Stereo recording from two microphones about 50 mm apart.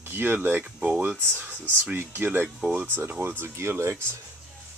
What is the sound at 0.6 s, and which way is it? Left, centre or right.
Speech, right.